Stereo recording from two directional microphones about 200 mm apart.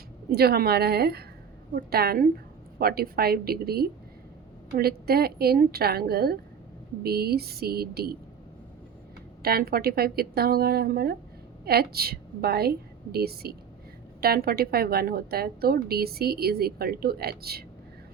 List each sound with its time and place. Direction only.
0.3 s a woman's voice: 50° right (ahead or behind)
9.4 s a woman's voice: 50° right (ahead or behind)